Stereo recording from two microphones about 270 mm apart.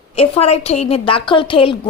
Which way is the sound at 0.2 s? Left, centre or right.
Left.